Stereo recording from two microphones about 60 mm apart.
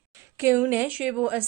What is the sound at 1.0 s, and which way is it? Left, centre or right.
Speech, centre.